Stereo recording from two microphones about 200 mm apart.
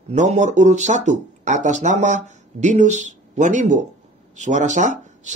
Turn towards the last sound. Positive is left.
turn(degrees=-40)  # may be behind; listen again after turning